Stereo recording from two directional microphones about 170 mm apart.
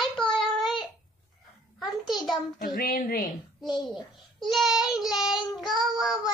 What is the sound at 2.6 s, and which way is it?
Speech, 60° left (ahead or behind).